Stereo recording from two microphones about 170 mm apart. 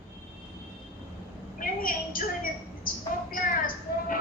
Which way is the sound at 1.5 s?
55° left (ahead or behind).